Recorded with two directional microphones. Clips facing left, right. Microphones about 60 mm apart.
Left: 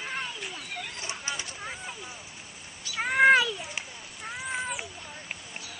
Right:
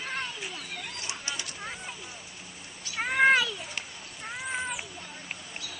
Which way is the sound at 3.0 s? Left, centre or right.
Centre.